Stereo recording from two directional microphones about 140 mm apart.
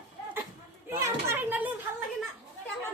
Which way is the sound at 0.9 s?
20° right (ahead or behind).